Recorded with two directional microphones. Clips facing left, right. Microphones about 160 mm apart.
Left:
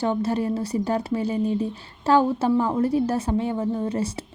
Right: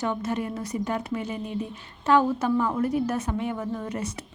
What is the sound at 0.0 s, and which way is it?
Speech, 30° left (ahead or behind).